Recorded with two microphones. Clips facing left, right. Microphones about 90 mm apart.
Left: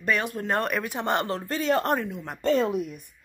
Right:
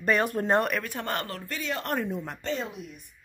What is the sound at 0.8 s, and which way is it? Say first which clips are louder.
Speech: left 6 dB; 20° left (ahead or behind).